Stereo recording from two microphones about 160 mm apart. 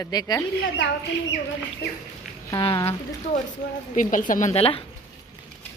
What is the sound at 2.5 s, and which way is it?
Speech, 25° left (ahead or behind).